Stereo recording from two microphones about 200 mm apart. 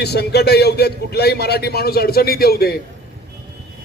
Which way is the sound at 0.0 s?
55° left (ahead or behind).